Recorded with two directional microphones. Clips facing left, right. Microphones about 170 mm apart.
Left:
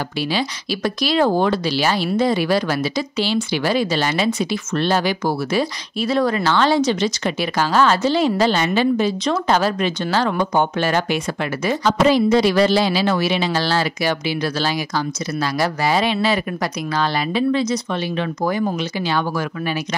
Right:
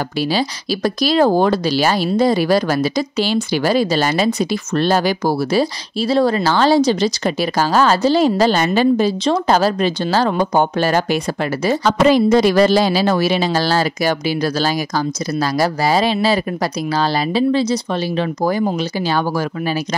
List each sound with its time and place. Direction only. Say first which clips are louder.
0.3 s speech: right 3 dB; 40° right (ahead or behind)